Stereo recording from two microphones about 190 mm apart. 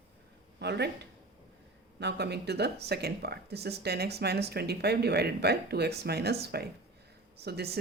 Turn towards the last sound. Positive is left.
turn(degrees=-55)  # may be behind; listen again after turning